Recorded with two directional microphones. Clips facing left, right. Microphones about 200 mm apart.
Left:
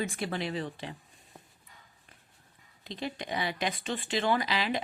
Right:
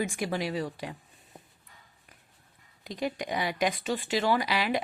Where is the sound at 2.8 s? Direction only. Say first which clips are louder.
Right 4 dB; 15° right (ahead or behind).